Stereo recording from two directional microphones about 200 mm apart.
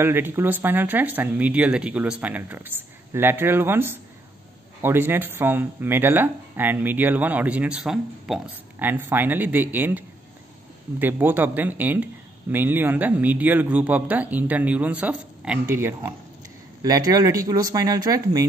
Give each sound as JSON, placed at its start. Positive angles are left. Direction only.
{"t": 0.0, "sound": "speech", "side_deg": -10}